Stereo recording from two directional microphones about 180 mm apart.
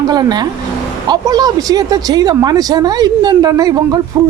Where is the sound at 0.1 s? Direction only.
20° right (ahead or behind).